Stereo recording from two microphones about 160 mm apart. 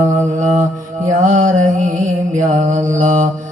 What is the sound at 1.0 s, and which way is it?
Mantra, 50° right (ahead or behind).